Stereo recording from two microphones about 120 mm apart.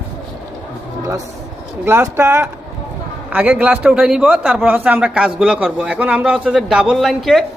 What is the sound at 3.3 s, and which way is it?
Speech, 15° right (ahead or behind).